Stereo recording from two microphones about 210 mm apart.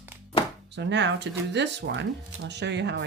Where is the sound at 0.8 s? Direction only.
55° right (ahead or behind).